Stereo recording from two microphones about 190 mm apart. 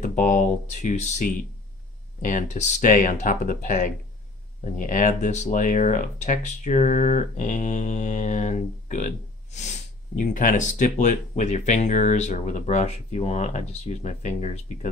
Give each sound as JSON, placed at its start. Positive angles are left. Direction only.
{"t": 0.0, "sound": "speech", "side_deg": 40}